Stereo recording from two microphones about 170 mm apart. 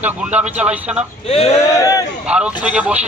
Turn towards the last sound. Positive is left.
turn(degrees=-10)  # may be behind; listen again after turning